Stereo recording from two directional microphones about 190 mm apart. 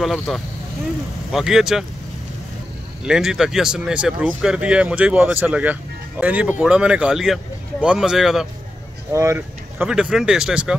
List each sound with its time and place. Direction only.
0.0 s speech: centre (ahead or behind)
3.1 s speech: 5° right (ahead or behind)
9.1 s speech: 15° right (ahead or behind)
9.8 s speech: 5° right (ahead or behind)